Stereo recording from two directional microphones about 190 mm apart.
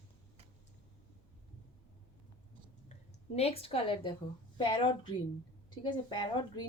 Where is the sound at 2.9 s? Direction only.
30° left (ahead or behind).